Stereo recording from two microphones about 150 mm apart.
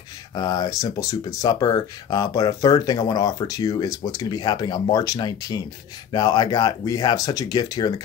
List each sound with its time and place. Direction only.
0.3 s speech: 25° left (ahead or behind)